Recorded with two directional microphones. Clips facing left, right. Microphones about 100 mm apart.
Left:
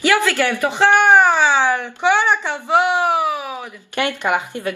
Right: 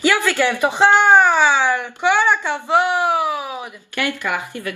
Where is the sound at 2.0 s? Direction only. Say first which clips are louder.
Even; 15° left (ahead or behind).